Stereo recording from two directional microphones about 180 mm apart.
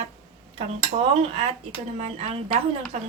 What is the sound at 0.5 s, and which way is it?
A woman's voice, 35° right (ahead or behind).